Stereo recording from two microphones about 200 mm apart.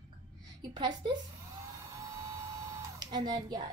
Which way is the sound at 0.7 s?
20° right (ahead or behind).